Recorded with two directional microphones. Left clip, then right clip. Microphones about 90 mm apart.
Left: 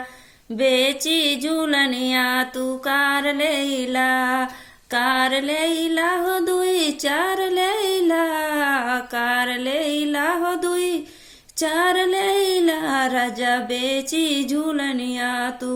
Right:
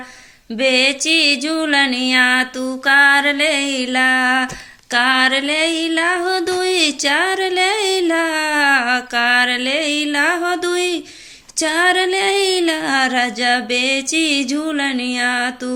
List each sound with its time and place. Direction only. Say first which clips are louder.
0.5 s music: right 3 dB; 35° left (ahead or behind)